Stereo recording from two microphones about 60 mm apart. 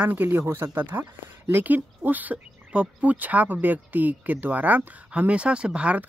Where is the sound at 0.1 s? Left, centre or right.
Right.